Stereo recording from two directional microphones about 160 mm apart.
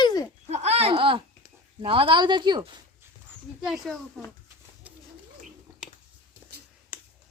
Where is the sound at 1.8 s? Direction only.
35° right (ahead or behind).